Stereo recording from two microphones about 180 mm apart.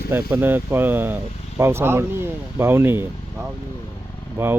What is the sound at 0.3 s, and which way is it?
Speech, 10° right (ahead or behind).